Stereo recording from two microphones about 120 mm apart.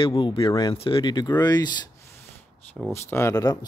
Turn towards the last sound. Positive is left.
turn(degrees=30)  # may be behind; listen again after turning